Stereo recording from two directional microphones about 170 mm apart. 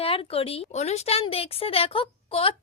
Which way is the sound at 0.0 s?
35° left (ahead or behind).